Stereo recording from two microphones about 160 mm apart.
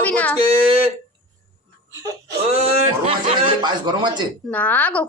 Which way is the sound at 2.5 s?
40° right (ahead or behind).